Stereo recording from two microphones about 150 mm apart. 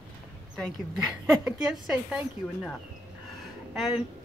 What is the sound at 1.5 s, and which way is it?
Speech, 5° right (ahead or behind).